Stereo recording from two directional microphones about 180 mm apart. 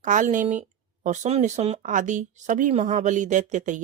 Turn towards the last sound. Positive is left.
turn(degrees=-45)  # may be behind; listen again after turning